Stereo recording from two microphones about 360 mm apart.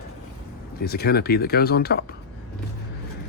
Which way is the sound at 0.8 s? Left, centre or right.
Left.